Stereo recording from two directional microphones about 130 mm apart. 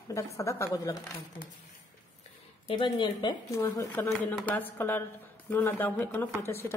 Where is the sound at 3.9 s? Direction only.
10° left (ahead or behind).